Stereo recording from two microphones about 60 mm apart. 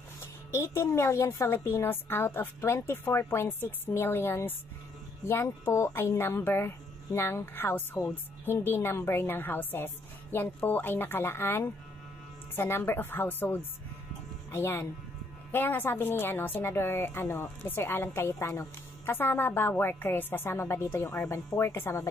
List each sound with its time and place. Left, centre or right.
0.2 s a woman's voice: left
14.5 s speech: left
15.5 s a woman's voice: left